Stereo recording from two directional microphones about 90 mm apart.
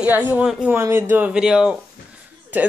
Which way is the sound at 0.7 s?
30° right (ahead or behind).